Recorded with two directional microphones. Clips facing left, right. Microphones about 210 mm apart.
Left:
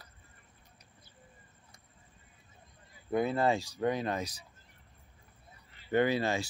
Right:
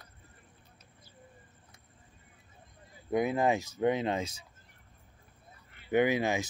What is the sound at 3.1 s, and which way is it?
Speech, 15° right (ahead or behind).